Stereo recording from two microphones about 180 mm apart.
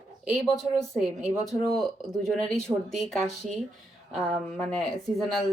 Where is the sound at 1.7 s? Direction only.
Centre (ahead or behind).